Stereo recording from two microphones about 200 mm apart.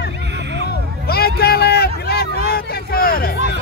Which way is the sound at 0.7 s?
50° left (ahead or behind).